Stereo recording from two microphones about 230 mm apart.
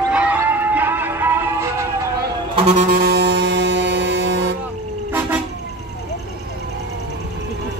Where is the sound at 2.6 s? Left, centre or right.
Right.